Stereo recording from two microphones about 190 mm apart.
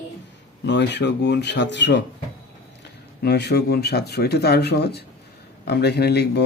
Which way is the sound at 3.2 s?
60° left (ahead or behind).